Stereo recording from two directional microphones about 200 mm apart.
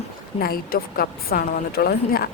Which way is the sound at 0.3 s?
50° left (ahead or behind).